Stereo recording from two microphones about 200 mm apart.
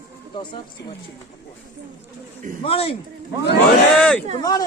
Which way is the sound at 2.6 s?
30° left (ahead or behind).